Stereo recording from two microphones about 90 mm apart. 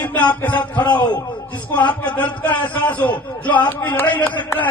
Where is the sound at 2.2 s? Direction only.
15° left (ahead or behind).